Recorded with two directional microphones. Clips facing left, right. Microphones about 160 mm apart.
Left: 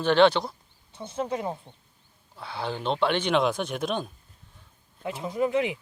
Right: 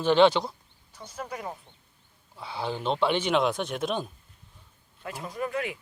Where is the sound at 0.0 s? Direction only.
5° right (ahead or behind).